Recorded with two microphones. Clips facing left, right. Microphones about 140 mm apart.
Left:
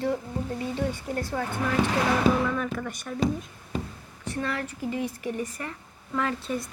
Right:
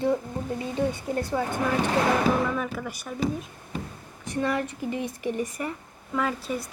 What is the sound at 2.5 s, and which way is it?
Speech, 5° right (ahead or behind).